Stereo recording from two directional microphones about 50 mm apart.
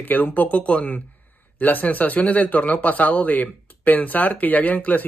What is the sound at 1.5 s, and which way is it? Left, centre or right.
Speech, left.